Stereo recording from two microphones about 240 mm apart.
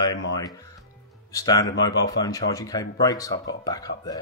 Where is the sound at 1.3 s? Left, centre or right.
Centre.